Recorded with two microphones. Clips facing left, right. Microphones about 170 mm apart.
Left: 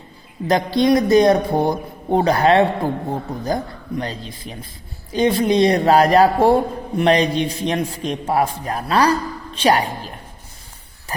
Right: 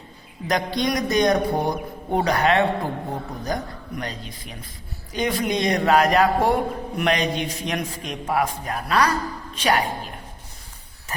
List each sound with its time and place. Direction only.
0.4 s a man's voice: 30° left (ahead or behind)